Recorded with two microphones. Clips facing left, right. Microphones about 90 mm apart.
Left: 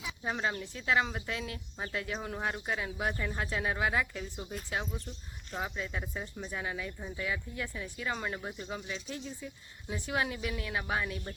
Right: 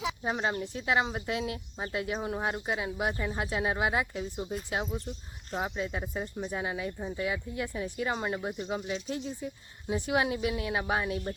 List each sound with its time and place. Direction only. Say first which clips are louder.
0.3 s speech: right 1 dB; 25° right (ahead or behind)
5.5 s speech: right 4 dB; 30° right (ahead or behind)
8.9 s speech: right 6 dB; 35° right (ahead or behind)